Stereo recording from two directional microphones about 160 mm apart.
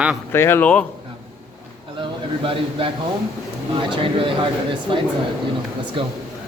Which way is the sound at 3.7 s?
30° right (ahead or behind).